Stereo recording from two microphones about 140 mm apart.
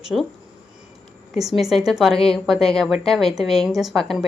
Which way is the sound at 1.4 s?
Centre (ahead or behind).